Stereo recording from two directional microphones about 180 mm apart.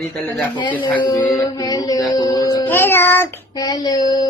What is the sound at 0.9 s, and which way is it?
Child singing, 15° left (ahead or behind).